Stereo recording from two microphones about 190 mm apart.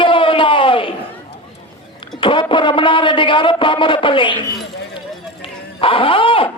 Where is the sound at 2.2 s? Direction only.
25° left (ahead or behind).